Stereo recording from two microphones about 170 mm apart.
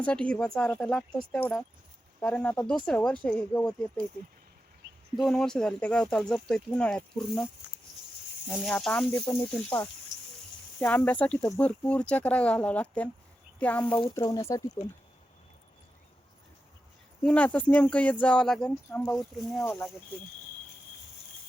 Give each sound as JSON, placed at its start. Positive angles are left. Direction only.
{"t": 0.0, "sound": "speech", "side_deg": 5}
{"t": 5.1, "sound": "speech", "side_deg": 0}
{"t": 8.5, "sound": "speech", "side_deg": 5}
{"t": 14.1, "sound": "speech", "side_deg": 20}
{"t": 17.2, "sound": "speech", "side_deg": 10}
{"t": 19.6, "sound": "speech", "side_deg": 15}